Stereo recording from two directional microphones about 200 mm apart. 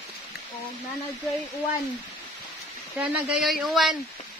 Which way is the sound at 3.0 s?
5° right (ahead or behind).